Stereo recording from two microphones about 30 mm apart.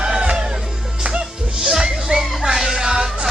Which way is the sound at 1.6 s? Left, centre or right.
Right.